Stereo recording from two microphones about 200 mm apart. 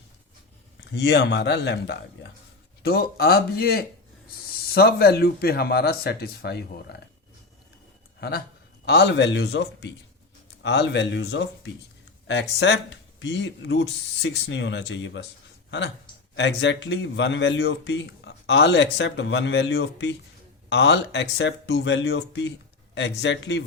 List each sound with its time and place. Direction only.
0.9 s a man's voice: 60° left (ahead or behind)
8.8 s a man's voice: 55° left (ahead or behind)
16.3 s a man's voice: 60° left (ahead or behind)